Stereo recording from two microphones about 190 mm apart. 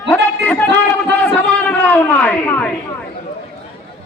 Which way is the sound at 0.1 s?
10° left (ahead or behind).